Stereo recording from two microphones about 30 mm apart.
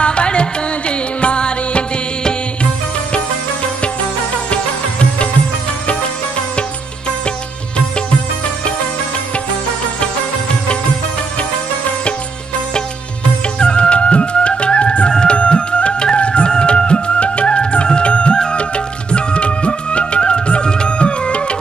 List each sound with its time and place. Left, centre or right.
0.0 s music: left
13.6 s music: left